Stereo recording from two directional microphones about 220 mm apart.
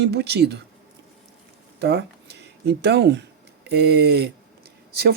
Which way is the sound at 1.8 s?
50° right (ahead or behind).